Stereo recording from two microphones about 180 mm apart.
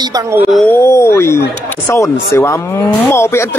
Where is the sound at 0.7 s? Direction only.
15° left (ahead or behind).